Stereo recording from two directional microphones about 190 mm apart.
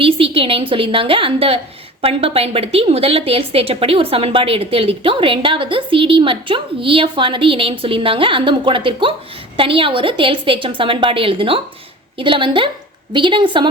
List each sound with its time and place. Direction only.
0.0 s a woman's voice: 30° right (ahead or behind)